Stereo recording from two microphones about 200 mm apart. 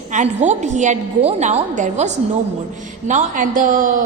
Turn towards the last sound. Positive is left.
turn(degrees=-40)  # may be behind; listen again after turning